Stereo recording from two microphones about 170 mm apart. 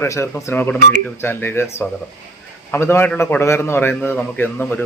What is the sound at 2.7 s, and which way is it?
Speech, 15° left (ahead or behind).